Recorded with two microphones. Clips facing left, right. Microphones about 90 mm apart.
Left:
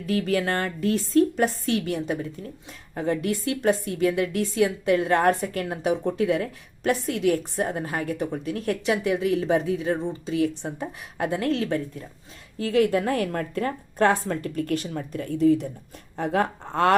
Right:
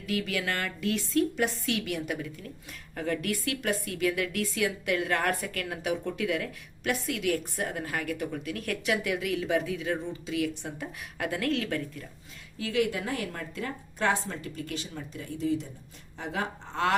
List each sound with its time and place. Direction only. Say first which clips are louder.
0.0 s a woman's voice: left 7 dB; 40° left (ahead or behind)
12.5 s a woman's voice: left 7 dB; 45° left (ahead or behind)